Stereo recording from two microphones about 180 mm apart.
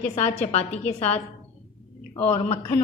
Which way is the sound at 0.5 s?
35° left (ahead or behind).